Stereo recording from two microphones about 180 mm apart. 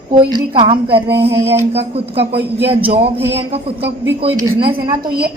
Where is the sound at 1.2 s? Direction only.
15° right (ahead or behind).